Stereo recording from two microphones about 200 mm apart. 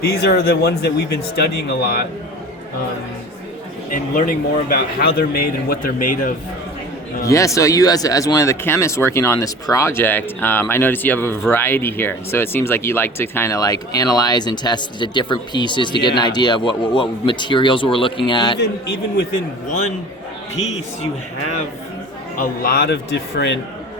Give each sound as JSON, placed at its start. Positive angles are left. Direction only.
{"t": 0.0, "sound": "a man's voice", "side_deg": 50}
{"t": 3.9, "sound": "a man's voice", "side_deg": 45}
{"t": 7.3, "sound": "speech", "side_deg": 15}
{"t": 18.6, "sound": "speech", "side_deg": 55}
{"t": 22.4, "sound": "speech", "side_deg": 45}